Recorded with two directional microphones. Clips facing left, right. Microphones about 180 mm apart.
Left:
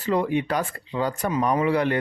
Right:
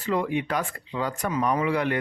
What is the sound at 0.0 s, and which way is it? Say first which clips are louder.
Speech: left 3 dB; 35° left (ahead or behind).